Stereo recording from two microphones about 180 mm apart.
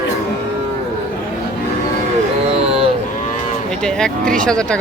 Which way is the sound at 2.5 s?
35° right (ahead or behind).